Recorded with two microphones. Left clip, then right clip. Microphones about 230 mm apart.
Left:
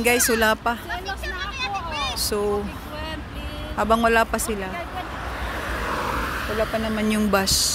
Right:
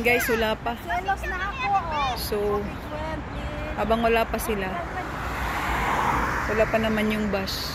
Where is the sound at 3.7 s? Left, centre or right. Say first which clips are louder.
Left 4 dB; left.